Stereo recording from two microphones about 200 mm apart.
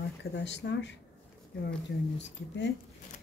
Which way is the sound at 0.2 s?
60° left (ahead or behind).